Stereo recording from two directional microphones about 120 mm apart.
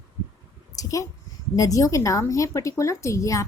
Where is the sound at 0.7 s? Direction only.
30° left (ahead or behind).